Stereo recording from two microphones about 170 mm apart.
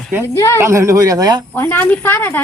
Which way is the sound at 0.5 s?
15° right (ahead or behind).